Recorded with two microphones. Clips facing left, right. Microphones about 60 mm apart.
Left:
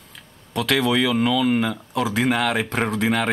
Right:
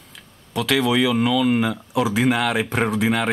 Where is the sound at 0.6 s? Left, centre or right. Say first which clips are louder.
Right 1 dB; centre.